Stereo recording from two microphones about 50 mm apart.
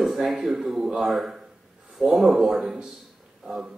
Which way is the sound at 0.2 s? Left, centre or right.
Right.